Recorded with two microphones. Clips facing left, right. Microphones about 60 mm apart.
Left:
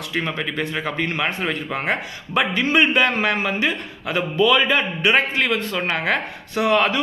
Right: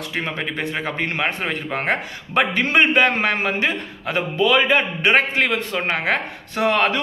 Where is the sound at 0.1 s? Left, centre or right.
Right.